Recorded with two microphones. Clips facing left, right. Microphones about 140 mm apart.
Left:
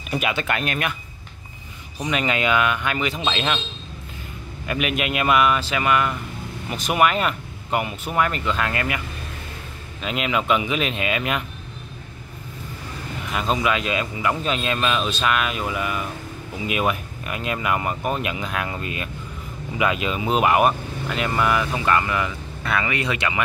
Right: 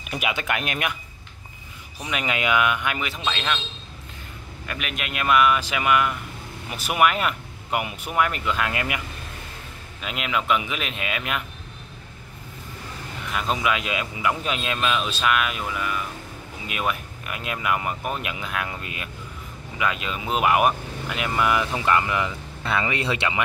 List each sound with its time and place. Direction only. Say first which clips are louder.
0.0 s speech: left 3 dB; 10° right (ahead or behind)
2.0 s speech: left 4 dB; 5° right (ahead or behind)
3.2 s speech: left 3 dB; 15° left (ahead or behind)
4.6 s speech: left 8 dB; 5° left (ahead or behind)
5.6 s speech: left 1 dB; 10° right (ahead or behind)
10.0 s speech: left 3 dB; centre (ahead or behind)
13.3 s speech: left 2 dB; centre (ahead or behind)
15.6 s speech: left 3 dB; 10° left (ahead or behind); by 19.0 s 5° right (ahead or behind)
19.8 s speech: left 4 dB; 5° left (ahead or behind); by 23.4 s 25° right (ahead or behind)